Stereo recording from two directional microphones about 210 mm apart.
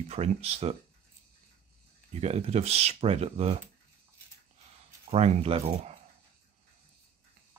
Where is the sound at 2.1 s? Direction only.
30° right (ahead or behind).